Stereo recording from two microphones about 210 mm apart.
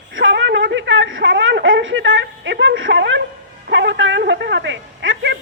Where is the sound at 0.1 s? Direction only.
65° right (ahead or behind).